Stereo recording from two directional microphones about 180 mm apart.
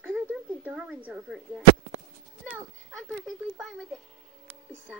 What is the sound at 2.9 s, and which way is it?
Speech, 5° left (ahead or behind).